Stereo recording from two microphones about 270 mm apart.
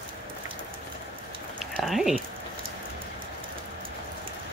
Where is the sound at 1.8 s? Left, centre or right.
Centre.